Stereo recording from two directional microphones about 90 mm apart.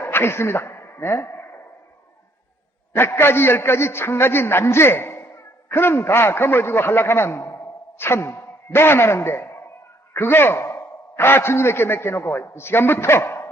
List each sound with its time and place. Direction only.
0.0 s a woman's voice: 25° left (ahead or behind)
2.9 s a man's voice: 25° left (ahead or behind)